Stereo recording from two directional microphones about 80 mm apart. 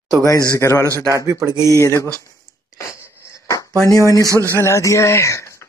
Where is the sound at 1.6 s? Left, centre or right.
Left.